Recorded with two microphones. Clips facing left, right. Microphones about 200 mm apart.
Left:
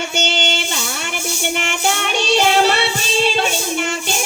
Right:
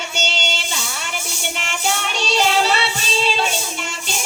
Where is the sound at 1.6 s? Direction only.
55° left (ahead or behind).